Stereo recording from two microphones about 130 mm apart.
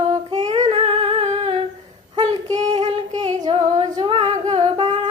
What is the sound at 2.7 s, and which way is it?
Singing, 35° right (ahead or behind).